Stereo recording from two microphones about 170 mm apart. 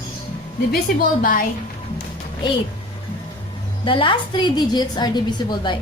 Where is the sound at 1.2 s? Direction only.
55° left (ahead or behind).